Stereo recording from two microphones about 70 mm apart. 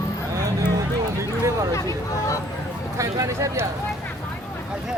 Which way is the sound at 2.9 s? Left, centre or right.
Right.